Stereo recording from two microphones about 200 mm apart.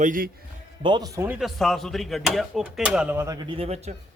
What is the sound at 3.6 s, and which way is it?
Speech, 30° right (ahead or behind).